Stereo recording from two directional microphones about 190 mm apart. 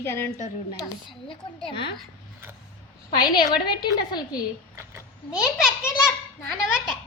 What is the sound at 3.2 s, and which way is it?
A woman's voice, 20° left (ahead or behind).